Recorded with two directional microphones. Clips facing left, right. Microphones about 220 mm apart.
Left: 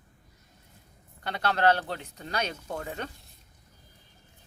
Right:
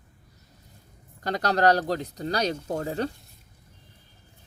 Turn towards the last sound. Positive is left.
turn(degrees=-35)  # may be behind; listen again after turning